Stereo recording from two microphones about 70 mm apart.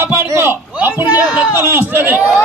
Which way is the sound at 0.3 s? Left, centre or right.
Right.